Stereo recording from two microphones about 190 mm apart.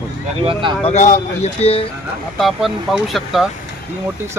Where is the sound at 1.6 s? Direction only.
30° left (ahead or behind).